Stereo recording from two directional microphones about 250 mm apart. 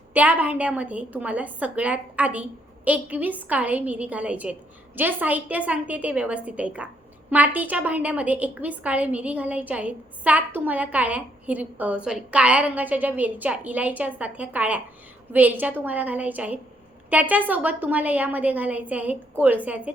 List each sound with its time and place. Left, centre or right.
0.1 s a woman's voice: centre